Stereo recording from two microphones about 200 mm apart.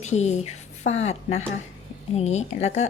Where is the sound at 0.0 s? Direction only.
35° left (ahead or behind).